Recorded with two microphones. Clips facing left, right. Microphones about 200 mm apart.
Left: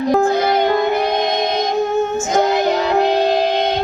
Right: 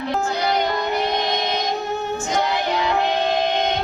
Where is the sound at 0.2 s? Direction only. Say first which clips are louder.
Left 6 dB; 50° left (ahead or behind).